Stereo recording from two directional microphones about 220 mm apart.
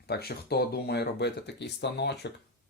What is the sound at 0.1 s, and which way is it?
Speech, 45° left (ahead or behind).